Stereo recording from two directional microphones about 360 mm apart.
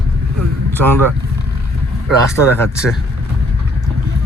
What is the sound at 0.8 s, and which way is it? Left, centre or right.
Speech, right.